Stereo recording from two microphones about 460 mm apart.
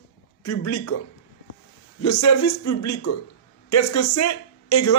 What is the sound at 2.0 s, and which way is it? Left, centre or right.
A man's voice, left.